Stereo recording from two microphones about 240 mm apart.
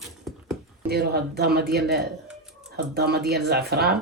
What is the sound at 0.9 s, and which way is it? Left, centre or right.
Speech, right.